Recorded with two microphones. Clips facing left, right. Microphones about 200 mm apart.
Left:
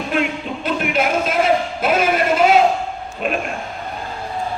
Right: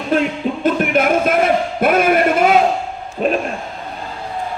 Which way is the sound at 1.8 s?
55° right (ahead or behind).